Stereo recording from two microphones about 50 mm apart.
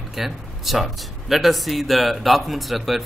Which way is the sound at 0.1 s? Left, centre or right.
Centre.